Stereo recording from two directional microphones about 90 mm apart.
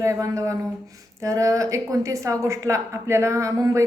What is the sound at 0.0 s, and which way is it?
A woman's voice, 35° right (ahead or behind).